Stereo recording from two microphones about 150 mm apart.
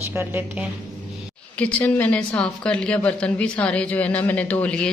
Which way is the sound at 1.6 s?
10° left (ahead or behind).